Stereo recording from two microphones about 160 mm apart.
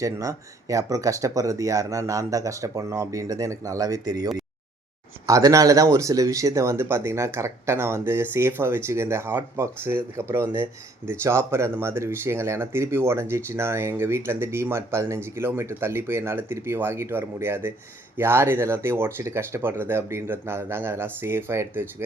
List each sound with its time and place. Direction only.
0.0 s speech: 20° right (ahead or behind)